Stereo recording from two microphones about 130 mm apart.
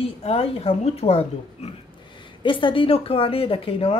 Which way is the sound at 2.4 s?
40° left (ahead or behind).